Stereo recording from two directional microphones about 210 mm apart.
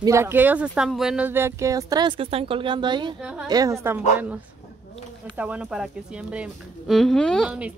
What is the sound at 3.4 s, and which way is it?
Speech, 15° right (ahead or behind).